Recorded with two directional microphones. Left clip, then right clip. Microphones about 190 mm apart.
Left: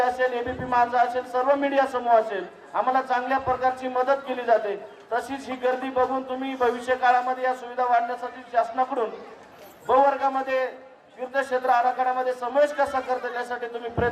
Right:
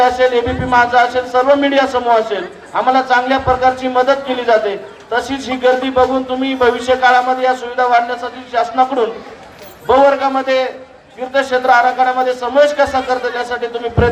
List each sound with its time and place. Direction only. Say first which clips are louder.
0.0 s a man's voice: right 12 dB; 35° right (ahead or behind)